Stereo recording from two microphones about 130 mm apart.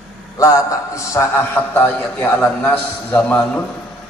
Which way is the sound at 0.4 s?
25° left (ahead or behind).